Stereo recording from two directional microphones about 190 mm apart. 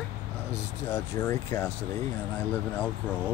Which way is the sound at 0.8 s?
15° left (ahead or behind).